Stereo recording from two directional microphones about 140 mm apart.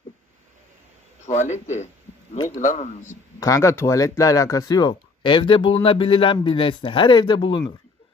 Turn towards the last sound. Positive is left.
turn(degrees=35)  # may be behind; listen again after turning